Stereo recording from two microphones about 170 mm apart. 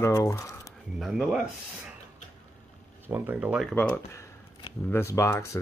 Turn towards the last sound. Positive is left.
turn(degrees=15)  # may be behind; listen again after turning